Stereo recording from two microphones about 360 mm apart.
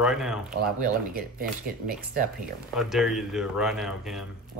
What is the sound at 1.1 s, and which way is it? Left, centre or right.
Speech, right.